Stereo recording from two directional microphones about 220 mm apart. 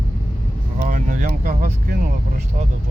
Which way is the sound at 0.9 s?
35° right (ahead or behind).